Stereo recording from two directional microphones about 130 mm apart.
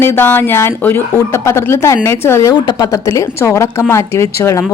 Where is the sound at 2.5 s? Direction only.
35° left (ahead or behind).